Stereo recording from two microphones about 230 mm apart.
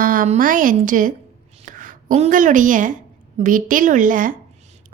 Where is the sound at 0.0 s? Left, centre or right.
Right.